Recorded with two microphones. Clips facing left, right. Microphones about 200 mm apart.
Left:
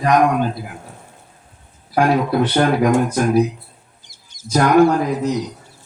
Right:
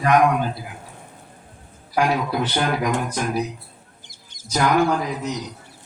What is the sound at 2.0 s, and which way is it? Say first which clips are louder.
Speech: left 5 dB; 55° left (ahead or behind).